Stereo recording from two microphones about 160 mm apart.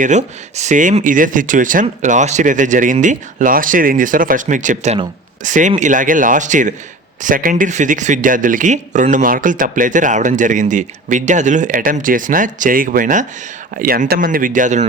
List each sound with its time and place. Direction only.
0.0 s speech: 45° right (ahead or behind)